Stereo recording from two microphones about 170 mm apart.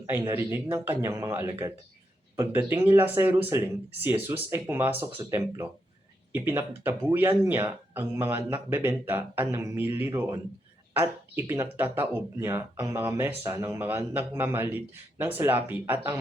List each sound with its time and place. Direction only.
0.1 s speech: 15° right (ahead or behind)
6.3 s speech: 10° right (ahead or behind)